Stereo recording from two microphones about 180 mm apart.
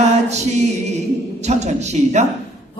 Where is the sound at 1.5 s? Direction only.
40° right (ahead or behind).